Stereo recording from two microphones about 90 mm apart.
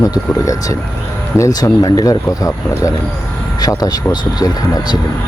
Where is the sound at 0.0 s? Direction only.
45° left (ahead or behind).